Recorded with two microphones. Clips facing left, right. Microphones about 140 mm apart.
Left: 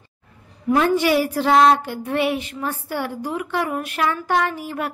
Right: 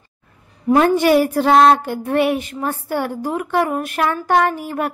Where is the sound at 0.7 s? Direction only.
45° right (ahead or behind).